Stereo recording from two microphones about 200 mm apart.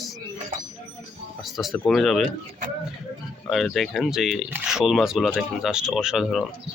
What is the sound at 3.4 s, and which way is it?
Speech, centre (ahead or behind).